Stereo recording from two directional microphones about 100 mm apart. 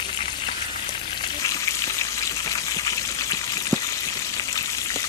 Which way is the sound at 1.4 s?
35° left (ahead or behind).